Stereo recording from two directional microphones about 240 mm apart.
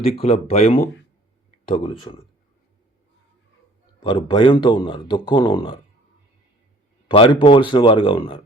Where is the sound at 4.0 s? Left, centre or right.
Left.